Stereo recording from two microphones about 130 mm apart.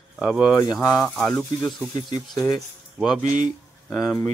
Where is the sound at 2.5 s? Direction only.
5° right (ahead or behind).